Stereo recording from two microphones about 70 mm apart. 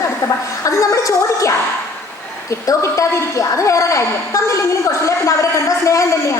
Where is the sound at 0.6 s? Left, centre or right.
Left.